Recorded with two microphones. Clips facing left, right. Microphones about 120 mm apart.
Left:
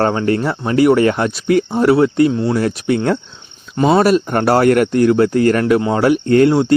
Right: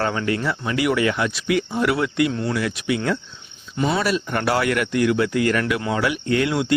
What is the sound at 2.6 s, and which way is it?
Speech, 40° left (ahead or behind).